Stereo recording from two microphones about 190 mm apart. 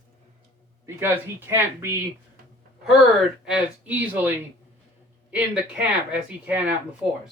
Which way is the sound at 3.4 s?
5° right (ahead or behind).